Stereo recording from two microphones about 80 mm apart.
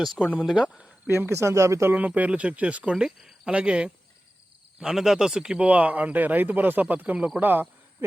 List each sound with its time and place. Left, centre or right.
0.3 s speech: centre
1.1 s speech: right
1.9 s speech: centre